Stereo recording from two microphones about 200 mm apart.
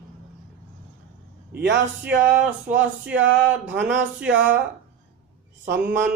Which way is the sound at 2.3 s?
10° right (ahead or behind).